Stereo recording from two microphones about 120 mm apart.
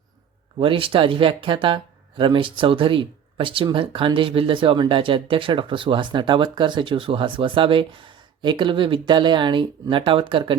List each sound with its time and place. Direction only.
0.6 s speech: 45° right (ahead or behind)